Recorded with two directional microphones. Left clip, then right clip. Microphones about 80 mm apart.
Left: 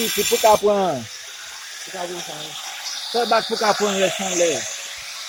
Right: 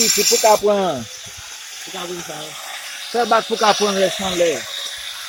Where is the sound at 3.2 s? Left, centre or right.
Right.